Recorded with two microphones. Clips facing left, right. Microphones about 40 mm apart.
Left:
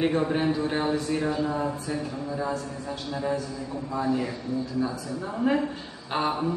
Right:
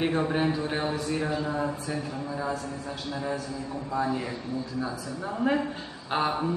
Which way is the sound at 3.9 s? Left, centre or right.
Centre.